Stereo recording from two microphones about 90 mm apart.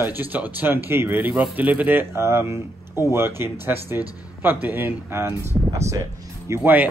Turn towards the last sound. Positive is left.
turn(degrees=-30)  # may be behind; listen again after turning